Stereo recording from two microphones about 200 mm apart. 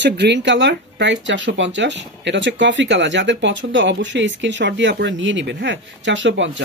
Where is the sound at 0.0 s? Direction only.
60° right (ahead or behind).